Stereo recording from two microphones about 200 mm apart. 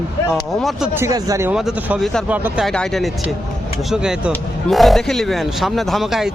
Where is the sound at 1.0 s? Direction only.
15° right (ahead or behind).